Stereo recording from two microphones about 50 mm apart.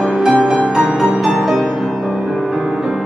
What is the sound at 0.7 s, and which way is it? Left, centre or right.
Music, centre.